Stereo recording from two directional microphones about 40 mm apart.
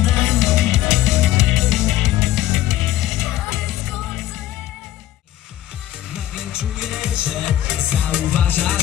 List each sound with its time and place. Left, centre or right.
0.0 s music: centre
6.1 s music: centre
8.3 s music: left